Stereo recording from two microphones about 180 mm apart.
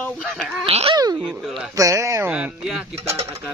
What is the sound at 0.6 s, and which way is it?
Speech, 30° right (ahead or behind).